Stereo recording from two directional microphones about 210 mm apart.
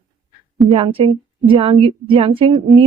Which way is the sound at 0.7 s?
25° right (ahead or behind).